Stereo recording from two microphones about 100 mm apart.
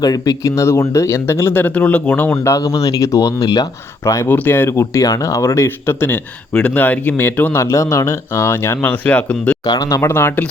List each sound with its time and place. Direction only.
0.0 s speech: 35° left (ahead or behind)
4.3 s speech: 20° left (ahead or behind)
6.5 s speech: 10° left (ahead or behind)
7.6 s speech: 30° left (ahead or behind); by 9.6 s 10° left (ahead or behind)
9.9 s speech: 25° left (ahead or behind)